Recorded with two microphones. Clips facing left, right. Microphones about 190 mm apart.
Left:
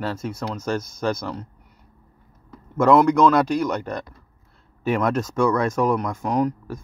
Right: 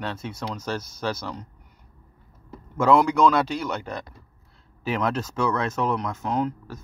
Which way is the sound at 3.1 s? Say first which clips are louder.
Left 3 dB; 5° right (ahead or behind).